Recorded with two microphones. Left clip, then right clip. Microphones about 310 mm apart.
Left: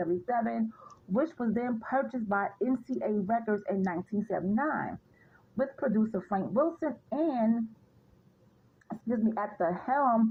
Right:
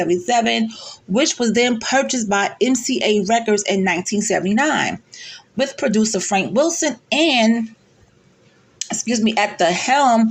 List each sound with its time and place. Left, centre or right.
0.0 s speech: left
8.9 s speech: left